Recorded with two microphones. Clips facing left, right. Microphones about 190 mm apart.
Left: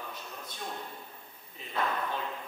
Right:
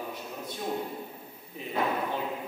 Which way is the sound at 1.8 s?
15° right (ahead or behind).